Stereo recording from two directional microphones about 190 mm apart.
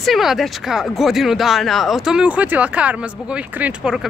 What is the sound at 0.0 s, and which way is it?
Speech, centre (ahead or behind).